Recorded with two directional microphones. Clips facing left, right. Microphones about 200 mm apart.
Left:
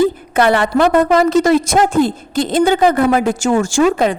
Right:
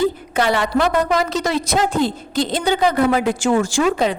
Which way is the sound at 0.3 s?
55° left (ahead or behind).